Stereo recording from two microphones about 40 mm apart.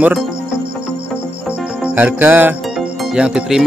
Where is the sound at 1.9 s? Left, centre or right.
Right.